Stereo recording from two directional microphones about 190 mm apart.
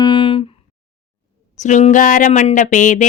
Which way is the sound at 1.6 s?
40° left (ahead or behind).